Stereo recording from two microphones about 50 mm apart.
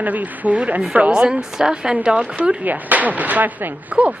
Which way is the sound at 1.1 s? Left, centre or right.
Centre.